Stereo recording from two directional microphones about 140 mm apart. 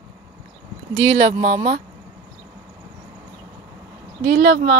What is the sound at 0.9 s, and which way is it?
Speech, 35° right (ahead or behind).